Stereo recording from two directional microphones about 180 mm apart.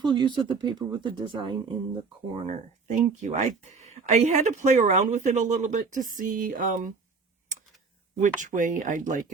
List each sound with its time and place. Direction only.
0.0 s speech: 25° right (ahead or behind); by 6.9 s 50° right (ahead or behind)
8.2 s speech: 45° right (ahead or behind)